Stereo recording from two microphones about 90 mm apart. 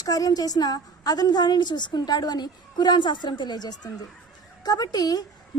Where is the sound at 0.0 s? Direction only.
45° left (ahead or behind).